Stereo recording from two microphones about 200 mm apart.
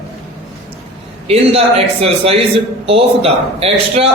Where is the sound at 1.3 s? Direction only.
30° right (ahead or behind).